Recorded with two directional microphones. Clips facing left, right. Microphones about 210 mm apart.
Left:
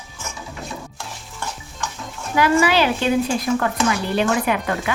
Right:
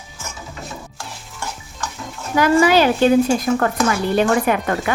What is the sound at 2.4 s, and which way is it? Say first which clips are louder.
Speech: right 3 dB; 45° right (ahead or behind).